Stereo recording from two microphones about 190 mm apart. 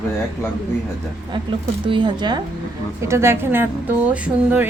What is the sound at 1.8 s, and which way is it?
A woman's voice, 25° right (ahead or behind).